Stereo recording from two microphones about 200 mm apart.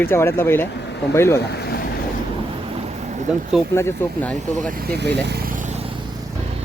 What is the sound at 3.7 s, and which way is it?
Speech, 10° left (ahead or behind).